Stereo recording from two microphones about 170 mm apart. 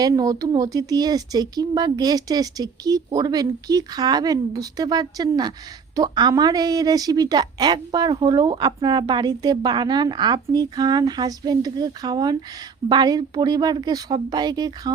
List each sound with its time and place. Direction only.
0.0 s a woman's voice: 20° right (ahead or behind)